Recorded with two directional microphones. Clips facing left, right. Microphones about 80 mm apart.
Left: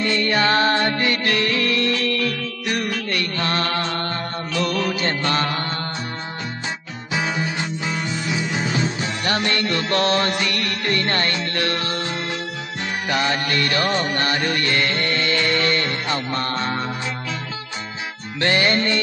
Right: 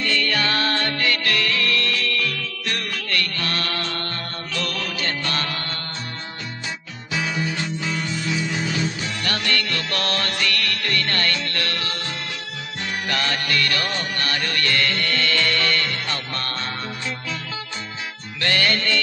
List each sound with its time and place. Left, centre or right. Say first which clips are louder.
0.0 s music: left 4 dB; left
4.5 s mantra: left 6 dB; left
9.2 s music: left 3 dB; left
13.1 s music: left 4 dB; centre
18.3 s music: left 3 dB; left